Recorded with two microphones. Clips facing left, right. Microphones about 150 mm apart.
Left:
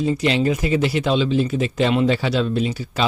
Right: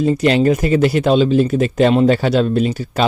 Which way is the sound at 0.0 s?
45° right (ahead or behind).